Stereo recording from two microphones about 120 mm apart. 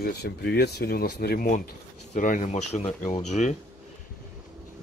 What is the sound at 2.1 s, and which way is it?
Speech, 90° left.